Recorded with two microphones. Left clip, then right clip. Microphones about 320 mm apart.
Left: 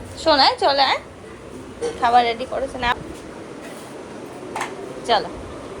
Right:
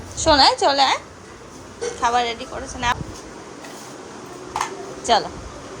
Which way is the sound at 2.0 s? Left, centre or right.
Centre.